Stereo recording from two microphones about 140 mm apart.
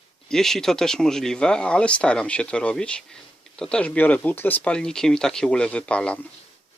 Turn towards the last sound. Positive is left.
turn(degrees=10)  # may be behind; listen again after turning